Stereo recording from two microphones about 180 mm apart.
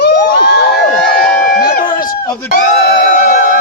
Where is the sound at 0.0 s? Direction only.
70° left (ahead or behind).